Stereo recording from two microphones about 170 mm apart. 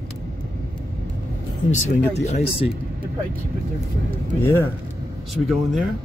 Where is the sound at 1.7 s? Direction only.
40° left (ahead or behind).